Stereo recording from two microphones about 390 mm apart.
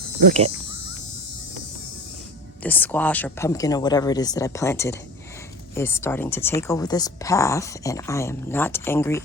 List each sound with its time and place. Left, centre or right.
0.2 s speech: centre
2.6 s speech: centre